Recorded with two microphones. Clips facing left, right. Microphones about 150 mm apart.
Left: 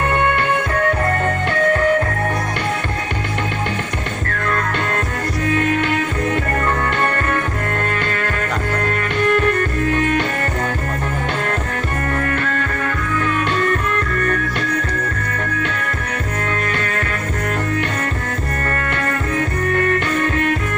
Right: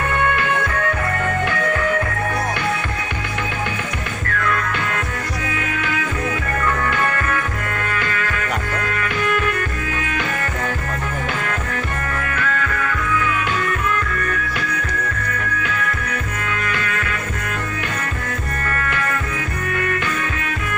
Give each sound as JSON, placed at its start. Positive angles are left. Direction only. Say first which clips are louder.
{"t": 4.4, "sound": "music", "louder": "left 2 dB", "side_deg": 40}
{"t": 6.9, "sound": "music", "louder": "left 2 dB", "side_deg": 30}
{"t": 8.2, "sound": "music", "louder": "left 2 dB", "side_deg": 45}
{"t": 12.2, "sound": "music", "louder": "left 2 dB", "side_deg": 40}
{"t": 16.6, "sound": "music", "louder": "left 2 dB", "side_deg": 40}
{"t": 18.7, "sound": "music", "louder": "even", "side_deg": 35}